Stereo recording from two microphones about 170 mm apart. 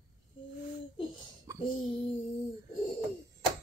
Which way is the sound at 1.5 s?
20° right (ahead or behind).